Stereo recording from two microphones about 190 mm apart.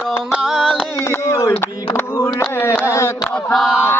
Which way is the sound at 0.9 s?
15° left (ahead or behind).